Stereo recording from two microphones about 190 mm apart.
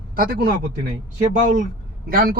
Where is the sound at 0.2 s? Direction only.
50° right (ahead or behind).